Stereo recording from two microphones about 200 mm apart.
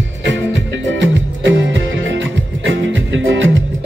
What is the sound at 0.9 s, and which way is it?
Music, 70° right (ahead or behind).